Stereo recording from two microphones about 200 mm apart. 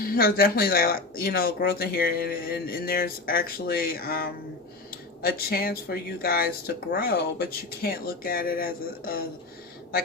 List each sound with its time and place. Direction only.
0.0 s speech: 45° left (ahead or behind)